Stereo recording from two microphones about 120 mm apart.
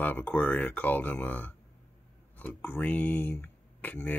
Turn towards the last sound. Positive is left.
turn(degrees=15)  # may be behind; listen again after turning